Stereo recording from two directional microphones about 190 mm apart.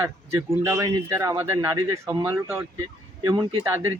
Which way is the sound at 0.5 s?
15° right (ahead or behind).